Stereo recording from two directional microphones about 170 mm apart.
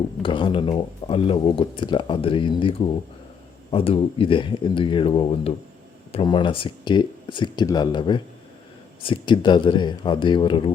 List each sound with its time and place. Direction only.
0.2 s speech: 30° left (ahead or behind)